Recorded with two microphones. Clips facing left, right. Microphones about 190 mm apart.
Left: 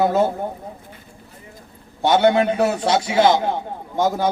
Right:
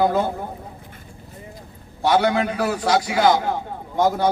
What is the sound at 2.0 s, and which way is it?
A man's voice, 25° left (ahead or behind).